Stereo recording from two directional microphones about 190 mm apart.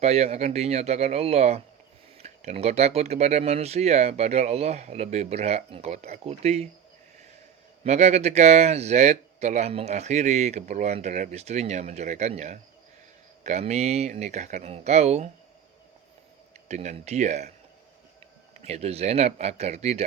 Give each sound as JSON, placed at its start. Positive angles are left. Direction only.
{"t": 0.0, "sound": "speech", "side_deg": -35}
{"t": 7.9, "sound": "speech", "side_deg": -35}
{"t": 16.6, "sound": "speech", "side_deg": -35}
{"t": 18.6, "sound": "speech", "side_deg": -35}